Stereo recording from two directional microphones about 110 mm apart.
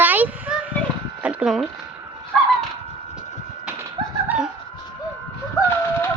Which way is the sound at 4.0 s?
40° right (ahead or behind).